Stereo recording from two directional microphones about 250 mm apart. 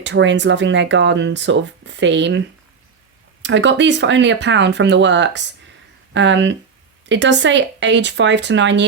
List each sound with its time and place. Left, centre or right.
0.0 s speech: right
3.4 s speech: right